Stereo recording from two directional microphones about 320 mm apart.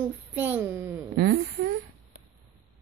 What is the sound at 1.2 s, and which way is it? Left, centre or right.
Speech, right.